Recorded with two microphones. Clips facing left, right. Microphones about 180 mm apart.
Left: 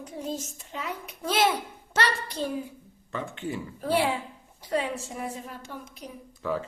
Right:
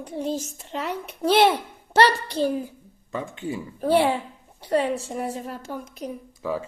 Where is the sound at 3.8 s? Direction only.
30° right (ahead or behind).